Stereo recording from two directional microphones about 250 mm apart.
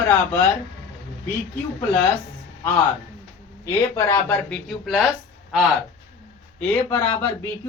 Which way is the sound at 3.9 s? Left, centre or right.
Centre.